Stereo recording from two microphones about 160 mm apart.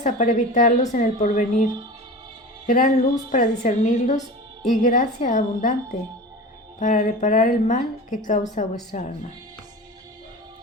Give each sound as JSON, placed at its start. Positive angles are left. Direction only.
{"t": 0.0, "sound": "a woman's voice", "side_deg": 50}
{"t": 6.7, "sound": "a woman's voice", "side_deg": 50}